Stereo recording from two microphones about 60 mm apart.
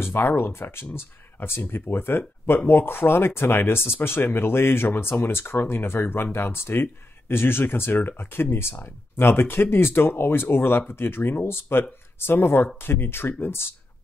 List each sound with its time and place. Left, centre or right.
0.0 s speech: left